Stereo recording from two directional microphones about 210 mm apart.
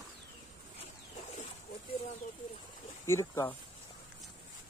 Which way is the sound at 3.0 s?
15° left (ahead or behind).